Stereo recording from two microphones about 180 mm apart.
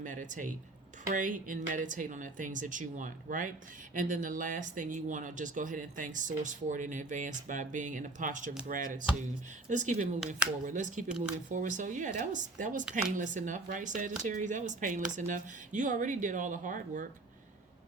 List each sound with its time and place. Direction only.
0.0 s speech: 45° right (ahead or behind)